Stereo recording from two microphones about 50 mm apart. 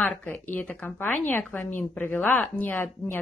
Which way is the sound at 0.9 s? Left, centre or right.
Left.